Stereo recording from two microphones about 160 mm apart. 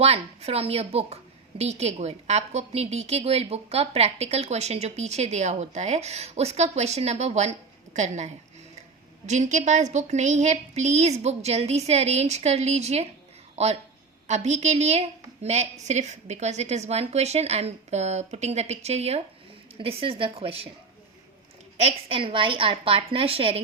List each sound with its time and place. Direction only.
0.0 s a woman's voice: 40° right (ahead or behind)
21.8 s a woman's voice: 35° right (ahead or behind)